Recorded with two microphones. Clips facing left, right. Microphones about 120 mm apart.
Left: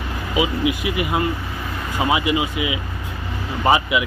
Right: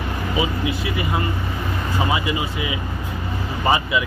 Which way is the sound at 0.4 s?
15° left (ahead or behind).